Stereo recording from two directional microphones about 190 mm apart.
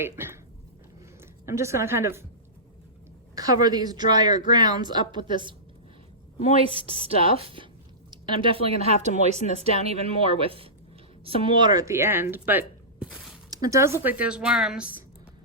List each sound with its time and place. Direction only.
0.0 s speech: 10° right (ahead or behind)
1.5 s speech: 15° right (ahead or behind)
3.3 s speech: 20° right (ahead or behind)
6.7 s speech: 30° right (ahead or behind); by 13.1 s 5° right (ahead or behind)
13.5 s speech: 20° right (ahead or behind)